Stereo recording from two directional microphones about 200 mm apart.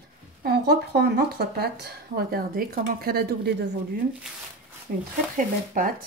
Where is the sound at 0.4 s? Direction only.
55° right (ahead or behind).